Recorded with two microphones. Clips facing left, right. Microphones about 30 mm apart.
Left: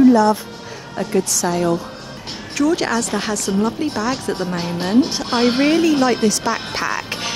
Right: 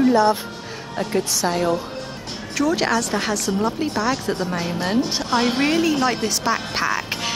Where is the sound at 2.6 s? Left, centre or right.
Centre.